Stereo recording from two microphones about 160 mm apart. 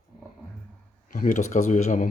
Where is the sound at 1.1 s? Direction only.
55° left (ahead or behind).